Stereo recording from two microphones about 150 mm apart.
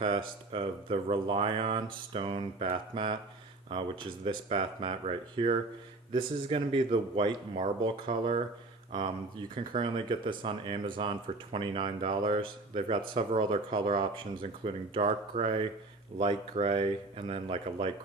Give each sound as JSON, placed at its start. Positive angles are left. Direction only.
{"t": 0.0, "sound": "speech", "side_deg": -35}